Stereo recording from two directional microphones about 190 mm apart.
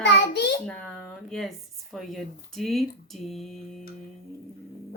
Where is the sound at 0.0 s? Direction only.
60° left (ahead or behind).